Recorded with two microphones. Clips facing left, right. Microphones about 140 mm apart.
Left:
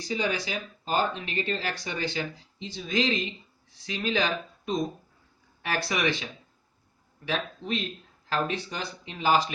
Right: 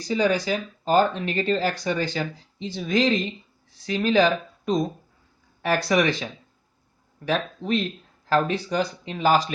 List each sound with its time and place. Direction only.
0.1 s speech: 40° right (ahead or behind)
7.3 s speech: 45° right (ahead or behind)